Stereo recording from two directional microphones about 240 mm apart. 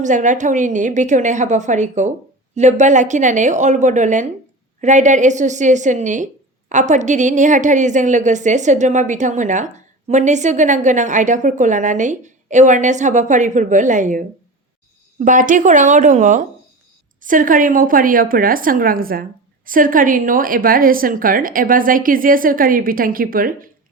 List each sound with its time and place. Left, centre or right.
0.0 s a woman's voice: right